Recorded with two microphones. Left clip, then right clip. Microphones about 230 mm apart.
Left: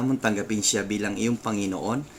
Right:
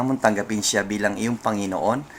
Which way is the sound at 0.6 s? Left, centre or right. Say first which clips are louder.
Right 6 dB; centre.